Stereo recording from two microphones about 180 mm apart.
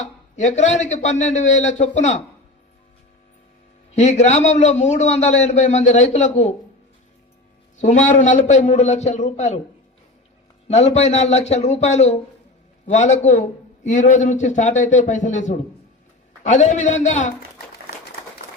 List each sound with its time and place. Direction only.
0.0 s a man's voice: 40° left (ahead or behind)
3.9 s a man's voice: 40° left (ahead or behind)
7.8 s a man's voice: 40° left (ahead or behind)
10.7 s a man's voice: 35° left (ahead or behind)